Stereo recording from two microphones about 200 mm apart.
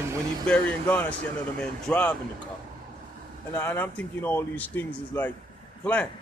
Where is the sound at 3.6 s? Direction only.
10° left (ahead or behind).